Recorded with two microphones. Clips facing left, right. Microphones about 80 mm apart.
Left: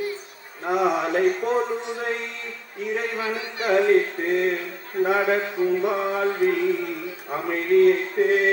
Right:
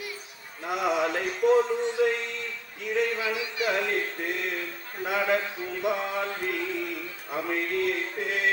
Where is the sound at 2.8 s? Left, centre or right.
Left.